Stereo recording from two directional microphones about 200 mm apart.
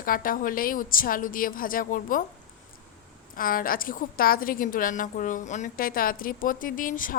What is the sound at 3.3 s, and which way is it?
A woman's voice, 45° left (ahead or behind).